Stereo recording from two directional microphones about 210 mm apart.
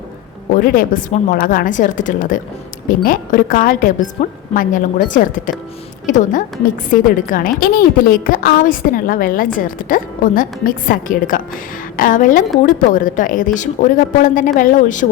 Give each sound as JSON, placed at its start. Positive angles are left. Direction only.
{"t": 0.6, "sound": "a woman's voice", "side_deg": 40}